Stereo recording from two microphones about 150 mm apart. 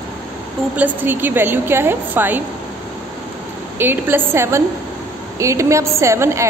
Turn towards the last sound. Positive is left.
turn(degrees=-20)  # may be behind; listen again after turning